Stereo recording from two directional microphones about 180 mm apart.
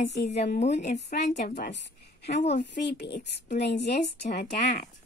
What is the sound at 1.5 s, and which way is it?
A woman's voice, 70° left (ahead or behind).